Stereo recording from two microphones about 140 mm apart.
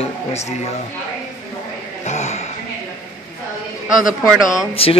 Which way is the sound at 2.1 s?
55° left (ahead or behind).